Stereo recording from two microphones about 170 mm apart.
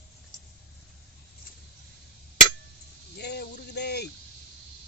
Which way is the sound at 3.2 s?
75° left (ahead or behind).